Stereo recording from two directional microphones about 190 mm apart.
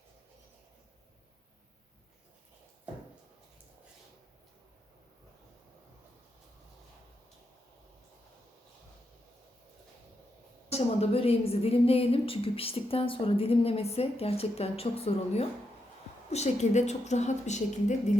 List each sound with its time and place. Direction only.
10.7 s a woman's voice: 35° left (ahead or behind)